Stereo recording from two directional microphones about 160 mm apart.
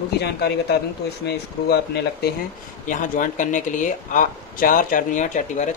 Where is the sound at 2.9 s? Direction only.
55° left (ahead or behind).